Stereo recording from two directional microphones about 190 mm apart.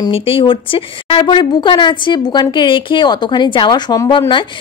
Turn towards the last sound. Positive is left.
turn(degrees=25)  # may be behind; listen again after turning